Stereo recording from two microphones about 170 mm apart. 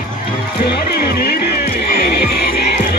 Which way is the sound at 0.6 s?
65° left (ahead or behind).